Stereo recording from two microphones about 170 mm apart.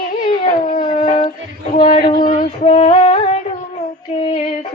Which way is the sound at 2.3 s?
45° left (ahead or behind).